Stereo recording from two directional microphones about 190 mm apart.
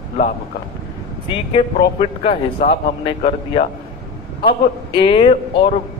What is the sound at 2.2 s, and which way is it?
A man's voice, 30° left (ahead or behind).